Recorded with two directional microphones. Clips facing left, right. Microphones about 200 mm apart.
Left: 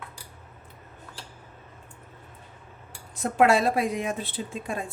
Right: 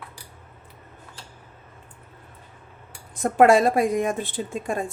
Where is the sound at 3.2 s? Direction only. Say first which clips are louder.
Right 5 dB; 50° right (ahead or behind).